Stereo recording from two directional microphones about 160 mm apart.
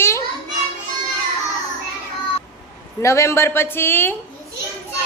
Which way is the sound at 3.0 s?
20° left (ahead or behind).